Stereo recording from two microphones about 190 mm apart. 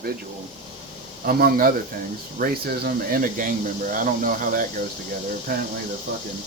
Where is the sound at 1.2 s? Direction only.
50° right (ahead or behind).